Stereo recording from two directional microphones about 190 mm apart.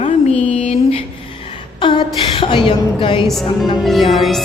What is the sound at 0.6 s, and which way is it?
Speech, 30° left (ahead or behind).